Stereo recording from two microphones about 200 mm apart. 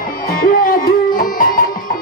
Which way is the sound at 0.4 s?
45° left (ahead or behind).